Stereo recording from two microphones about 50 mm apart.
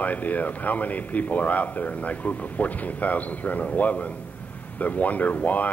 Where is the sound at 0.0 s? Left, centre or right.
Left.